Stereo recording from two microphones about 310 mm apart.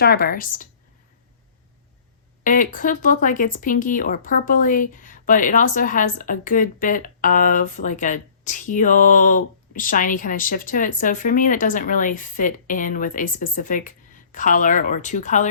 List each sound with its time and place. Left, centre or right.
0.0 s speech: left
2.4 s speech: left